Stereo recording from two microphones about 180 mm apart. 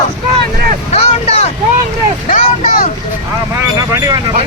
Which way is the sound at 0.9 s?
35° left (ahead or behind).